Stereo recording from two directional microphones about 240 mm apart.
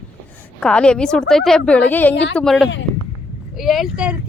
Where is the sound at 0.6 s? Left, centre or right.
Centre.